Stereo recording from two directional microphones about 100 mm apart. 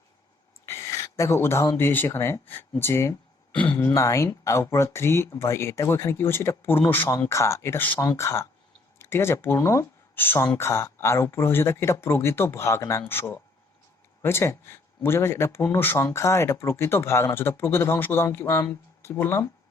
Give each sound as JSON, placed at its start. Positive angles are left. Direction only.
{"t": 0.6, "sound": "a sound", "side_deg": 30}
{"t": 1.6, "sound": "speech", "side_deg": 25}
{"t": 3.5, "sound": "speech", "side_deg": 15}
{"t": 3.8, "sound": "speech", "side_deg": 30}